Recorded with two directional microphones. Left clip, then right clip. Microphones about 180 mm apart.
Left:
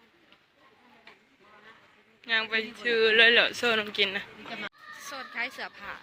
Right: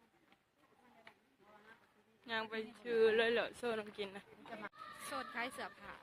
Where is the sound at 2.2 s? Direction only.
15° right (ahead or behind).